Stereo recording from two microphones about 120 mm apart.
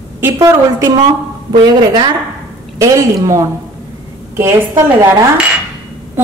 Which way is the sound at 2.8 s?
25° right (ahead or behind).